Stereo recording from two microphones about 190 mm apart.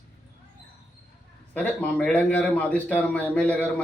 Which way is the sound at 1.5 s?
10° left (ahead or behind).